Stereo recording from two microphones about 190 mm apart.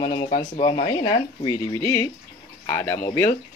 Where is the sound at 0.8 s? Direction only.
25° left (ahead or behind).